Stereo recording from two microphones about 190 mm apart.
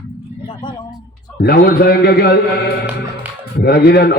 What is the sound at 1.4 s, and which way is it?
A man's voice, 55° left (ahead or behind).